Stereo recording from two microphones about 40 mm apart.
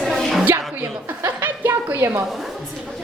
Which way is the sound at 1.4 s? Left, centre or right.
Right.